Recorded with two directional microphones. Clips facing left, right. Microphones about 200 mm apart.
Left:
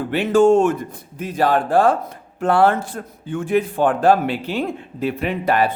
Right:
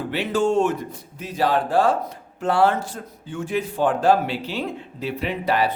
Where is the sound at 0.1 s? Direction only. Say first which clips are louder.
Left 8 dB; 50° left (ahead or behind).